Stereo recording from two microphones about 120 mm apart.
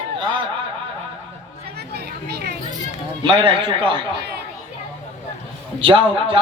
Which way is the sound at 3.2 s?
45° right (ahead or behind).